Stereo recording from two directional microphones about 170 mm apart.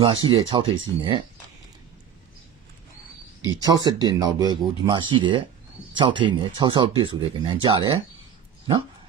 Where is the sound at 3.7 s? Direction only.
25° right (ahead or behind).